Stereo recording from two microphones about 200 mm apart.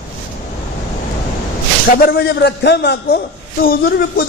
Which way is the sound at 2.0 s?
55° left (ahead or behind).